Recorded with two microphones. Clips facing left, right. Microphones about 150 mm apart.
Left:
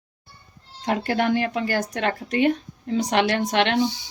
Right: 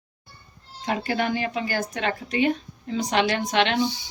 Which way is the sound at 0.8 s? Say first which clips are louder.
Left 3 dB; 60° left (ahead or behind).